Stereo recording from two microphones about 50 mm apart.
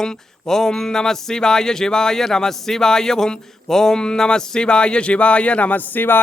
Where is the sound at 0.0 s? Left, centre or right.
Centre.